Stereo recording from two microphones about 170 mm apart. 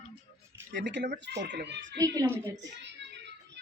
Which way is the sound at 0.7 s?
90° right.